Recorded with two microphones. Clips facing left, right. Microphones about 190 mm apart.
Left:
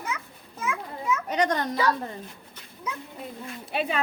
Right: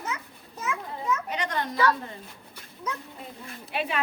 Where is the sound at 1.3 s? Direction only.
45° left (ahead or behind).